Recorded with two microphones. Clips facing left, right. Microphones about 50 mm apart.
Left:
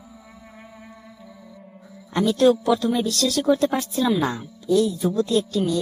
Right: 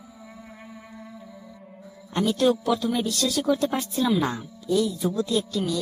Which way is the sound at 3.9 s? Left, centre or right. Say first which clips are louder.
Right 1 dB; left.